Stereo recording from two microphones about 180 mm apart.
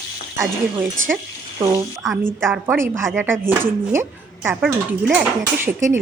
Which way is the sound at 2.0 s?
10° right (ahead or behind).